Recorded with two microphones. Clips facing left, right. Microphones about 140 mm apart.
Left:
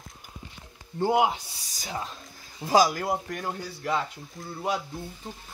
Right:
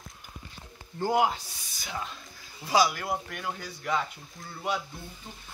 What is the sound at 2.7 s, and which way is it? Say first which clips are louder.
Speech: left 3 dB; 45° left (ahead or behind).